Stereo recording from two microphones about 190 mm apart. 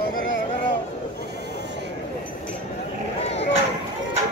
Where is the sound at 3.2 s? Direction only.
35° left (ahead or behind).